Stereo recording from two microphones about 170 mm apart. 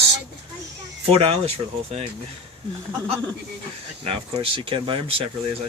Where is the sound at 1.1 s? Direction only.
35° right (ahead or behind).